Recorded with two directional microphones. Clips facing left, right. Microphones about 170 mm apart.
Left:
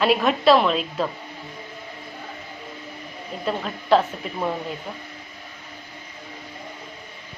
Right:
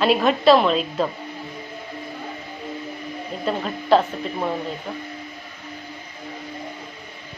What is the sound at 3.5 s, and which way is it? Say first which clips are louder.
Speech: right 2 dB; centre (ahead or behind).